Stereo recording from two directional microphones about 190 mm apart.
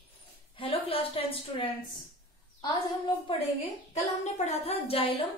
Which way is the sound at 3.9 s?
35° left (ahead or behind).